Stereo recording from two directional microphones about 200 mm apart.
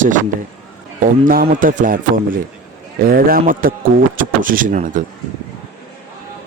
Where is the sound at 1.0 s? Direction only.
45° right (ahead or behind).